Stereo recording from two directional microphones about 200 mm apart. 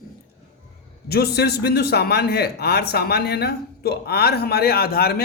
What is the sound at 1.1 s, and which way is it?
A man's voice, 50° left (ahead or behind).